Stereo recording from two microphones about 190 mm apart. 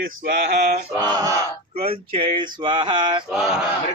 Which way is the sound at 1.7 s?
30° right (ahead or behind).